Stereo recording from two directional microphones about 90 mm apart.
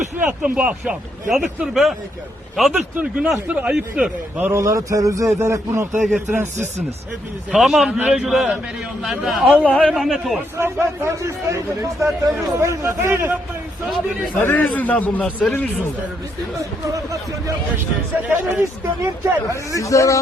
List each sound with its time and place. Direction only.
0.2 s a man's voice: 15° right (ahead or behind)
2.9 s speech: 15° right (ahead or behind)
4.5 s a man's voice: 35° right (ahead or behind)
7.5 s a man's voice: 5° right (ahead or behind)
9.6 s a man's voice: 10° left (ahead or behind)
9.9 s a man's voice: centre (ahead or behind)
10.6 s a man's voice: 30° right (ahead or behind)
14.3 s a man's voice: 25° left (ahead or behind)
16.8 s a man's voice: 40° right (ahead or behind)
18.3 s speech: 20° right (ahead or behind)
19.2 s speech: 30° right (ahead or behind)
19.7 s a man's voice: 35° left (ahead or behind)